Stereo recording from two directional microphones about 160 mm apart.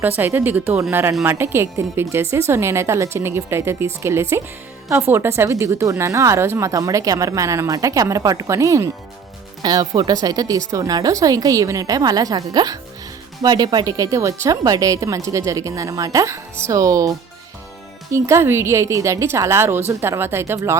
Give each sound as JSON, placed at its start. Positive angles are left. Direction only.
{"t": 0.0, "sound": "a woman's voice", "side_deg": -10}